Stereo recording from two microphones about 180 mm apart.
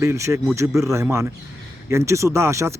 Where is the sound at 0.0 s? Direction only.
15° right (ahead or behind).